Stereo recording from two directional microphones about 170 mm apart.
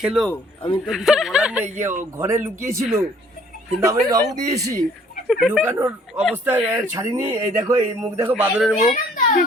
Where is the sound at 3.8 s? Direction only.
20° right (ahead or behind).